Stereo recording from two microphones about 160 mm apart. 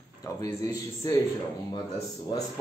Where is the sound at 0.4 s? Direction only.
20° left (ahead or behind).